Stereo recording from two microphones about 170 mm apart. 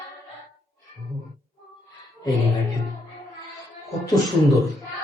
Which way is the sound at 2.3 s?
Centre (ahead or behind).